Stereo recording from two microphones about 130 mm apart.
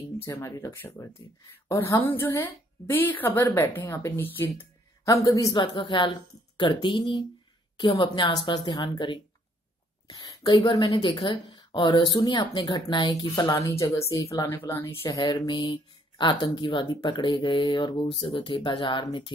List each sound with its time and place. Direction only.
0.2 s a woman's voice: 20° left (ahead or behind); by 19.3 s 40° left (ahead or behind)